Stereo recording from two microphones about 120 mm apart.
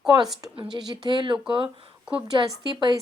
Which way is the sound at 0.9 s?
40° right (ahead or behind).